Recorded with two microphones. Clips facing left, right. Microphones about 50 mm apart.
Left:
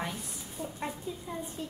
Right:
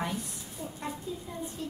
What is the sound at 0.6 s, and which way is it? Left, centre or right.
Speech, left.